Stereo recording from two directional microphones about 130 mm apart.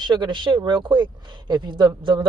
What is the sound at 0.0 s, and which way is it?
Speech, 35° right (ahead or behind).